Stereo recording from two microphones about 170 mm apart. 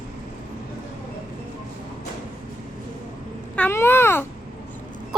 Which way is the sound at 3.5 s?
10° left (ahead or behind).